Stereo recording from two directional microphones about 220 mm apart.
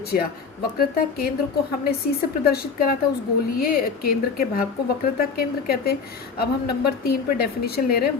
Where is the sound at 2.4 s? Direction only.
45° left (ahead or behind).